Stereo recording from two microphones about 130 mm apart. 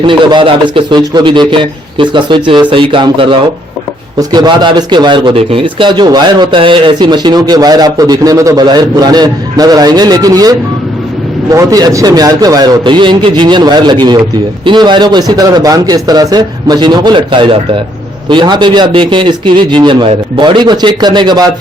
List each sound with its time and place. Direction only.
0.0 s speech: 40° right (ahead or behind)